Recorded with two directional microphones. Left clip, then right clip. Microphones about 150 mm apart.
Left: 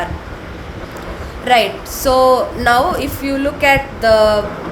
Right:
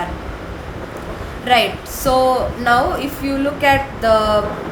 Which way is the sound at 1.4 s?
25° left (ahead or behind).